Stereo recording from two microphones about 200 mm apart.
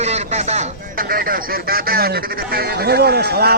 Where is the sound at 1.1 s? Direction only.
45° right (ahead or behind).